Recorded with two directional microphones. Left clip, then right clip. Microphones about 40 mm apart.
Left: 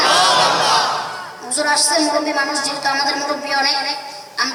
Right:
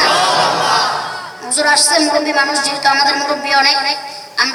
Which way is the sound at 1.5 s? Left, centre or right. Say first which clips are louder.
Right 4 dB; right.